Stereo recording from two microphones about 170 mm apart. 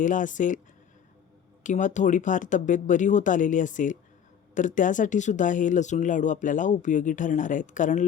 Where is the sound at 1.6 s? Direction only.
45° left (ahead or behind).